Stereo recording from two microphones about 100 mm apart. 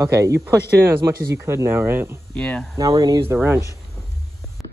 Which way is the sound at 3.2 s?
25° right (ahead or behind).